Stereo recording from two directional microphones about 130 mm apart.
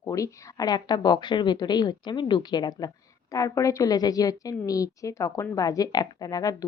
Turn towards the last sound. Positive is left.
turn(degrees=30)  # may be behind; listen again after turning